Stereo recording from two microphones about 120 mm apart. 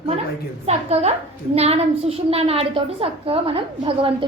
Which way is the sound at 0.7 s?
60° right (ahead or behind).